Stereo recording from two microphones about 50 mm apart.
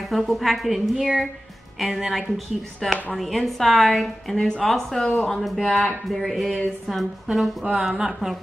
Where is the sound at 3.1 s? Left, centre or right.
Centre.